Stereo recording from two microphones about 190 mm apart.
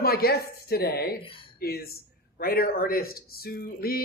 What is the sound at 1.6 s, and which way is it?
Speech, 55° left (ahead or behind).